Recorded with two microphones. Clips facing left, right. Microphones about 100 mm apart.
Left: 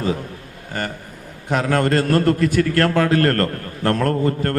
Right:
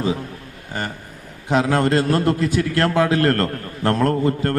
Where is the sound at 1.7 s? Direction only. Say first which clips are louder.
Left 4 dB; 15° right (ahead or behind).